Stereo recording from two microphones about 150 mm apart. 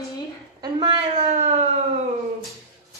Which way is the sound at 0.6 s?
30° right (ahead or behind).